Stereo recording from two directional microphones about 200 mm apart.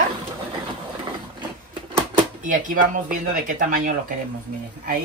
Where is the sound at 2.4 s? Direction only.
40° right (ahead or behind).